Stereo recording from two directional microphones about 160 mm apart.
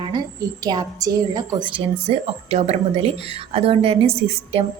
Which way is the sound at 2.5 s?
40° right (ahead or behind).